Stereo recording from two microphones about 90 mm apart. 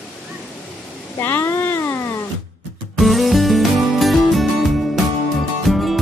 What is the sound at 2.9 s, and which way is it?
Music, centre (ahead or behind).